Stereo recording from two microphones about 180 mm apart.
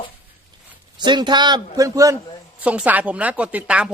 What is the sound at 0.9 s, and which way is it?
Speech, 25° right (ahead or behind).